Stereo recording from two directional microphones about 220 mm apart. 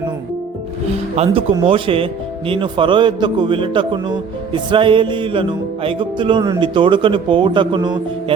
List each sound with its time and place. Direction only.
1.1 s a man's voice: 25° right (ahead or behind)